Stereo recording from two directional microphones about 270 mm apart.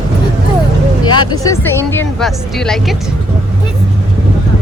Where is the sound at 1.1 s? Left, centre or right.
Centre.